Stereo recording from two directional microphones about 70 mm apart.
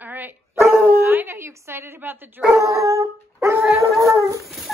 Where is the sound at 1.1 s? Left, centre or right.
Right.